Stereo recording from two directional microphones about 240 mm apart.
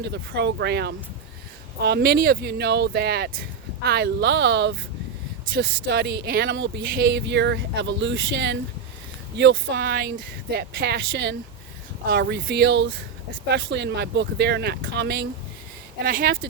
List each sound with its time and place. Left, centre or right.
0.0 s speech: right